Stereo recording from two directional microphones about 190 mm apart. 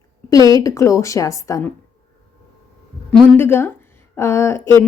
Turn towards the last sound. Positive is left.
turn(degrees=15)  # may be behind; listen again after turning